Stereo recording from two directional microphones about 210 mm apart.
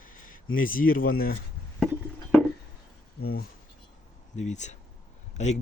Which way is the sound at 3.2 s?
45° left (ahead or behind).